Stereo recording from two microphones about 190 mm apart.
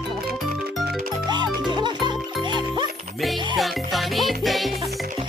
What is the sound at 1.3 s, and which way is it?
Music, 25° right (ahead or behind).